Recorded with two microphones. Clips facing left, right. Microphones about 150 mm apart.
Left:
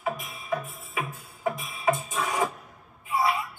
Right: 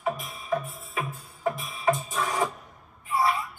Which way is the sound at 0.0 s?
Centre (ahead or behind).